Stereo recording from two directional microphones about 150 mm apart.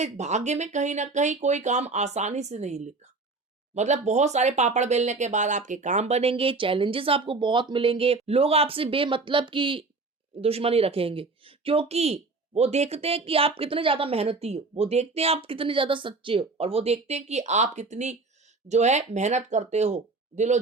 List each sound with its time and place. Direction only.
0.0 s speech: 50° right (ahead or behind)